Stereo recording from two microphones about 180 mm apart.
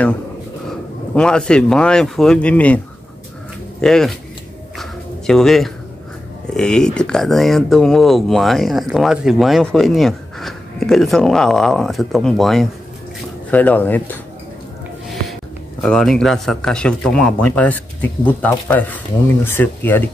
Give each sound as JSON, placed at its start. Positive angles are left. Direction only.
{"t": 1.1, "sound": "speech", "side_deg": 5}
{"t": 3.8, "sound": "speech", "side_deg": 0}
{"t": 4.7, "sound": "a sound", "side_deg": 0}
{"t": 6.5, "sound": "speech", "side_deg": 5}
{"t": 15.8, "sound": "speech", "side_deg": 5}